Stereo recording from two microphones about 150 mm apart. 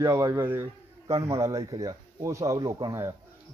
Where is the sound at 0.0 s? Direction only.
25° right (ahead or behind).